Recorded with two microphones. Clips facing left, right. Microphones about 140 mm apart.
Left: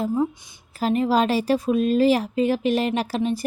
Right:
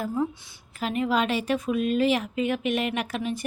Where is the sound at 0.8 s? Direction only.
35° left (ahead or behind).